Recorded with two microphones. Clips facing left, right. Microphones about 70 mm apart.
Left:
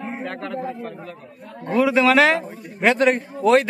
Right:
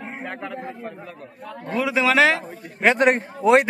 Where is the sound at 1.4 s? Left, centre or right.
Right.